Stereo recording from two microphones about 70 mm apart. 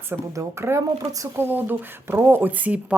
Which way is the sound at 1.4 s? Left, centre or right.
Right.